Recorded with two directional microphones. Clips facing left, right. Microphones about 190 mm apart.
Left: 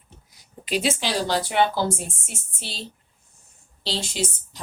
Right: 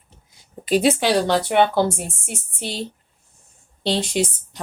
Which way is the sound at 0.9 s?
60° right (ahead or behind).